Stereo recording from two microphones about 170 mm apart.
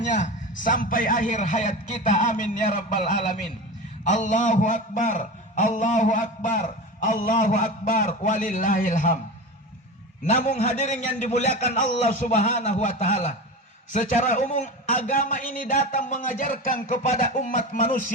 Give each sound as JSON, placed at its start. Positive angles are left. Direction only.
{"t": 0.6, "sound": "a man's voice", "side_deg": 50}
{"t": 10.2, "sound": "a man's voice", "side_deg": 40}